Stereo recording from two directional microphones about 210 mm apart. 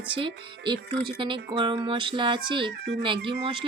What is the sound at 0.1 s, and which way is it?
Music, 25° right (ahead or behind).